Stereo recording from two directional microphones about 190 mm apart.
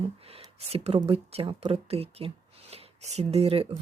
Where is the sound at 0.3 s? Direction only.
30° right (ahead or behind).